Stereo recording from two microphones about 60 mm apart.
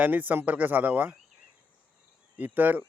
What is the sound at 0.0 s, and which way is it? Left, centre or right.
Speech, right.